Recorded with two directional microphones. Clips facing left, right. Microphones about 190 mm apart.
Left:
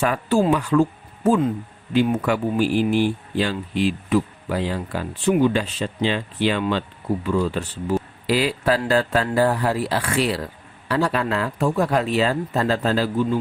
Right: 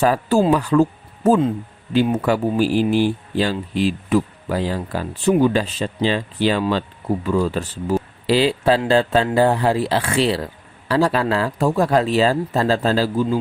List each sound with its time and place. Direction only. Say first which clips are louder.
0.0 s a man's voice: right 3 dB; 35° right (ahead or behind)
8.3 s a man's voice: right 4 dB; 25° right (ahead or behind)